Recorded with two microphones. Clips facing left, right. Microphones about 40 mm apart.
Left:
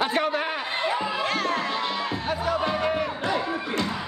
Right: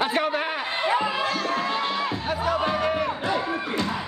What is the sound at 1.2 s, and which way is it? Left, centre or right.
Music, left.